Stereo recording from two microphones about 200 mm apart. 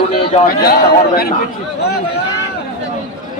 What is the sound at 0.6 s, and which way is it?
Speech, 50° left (ahead or behind).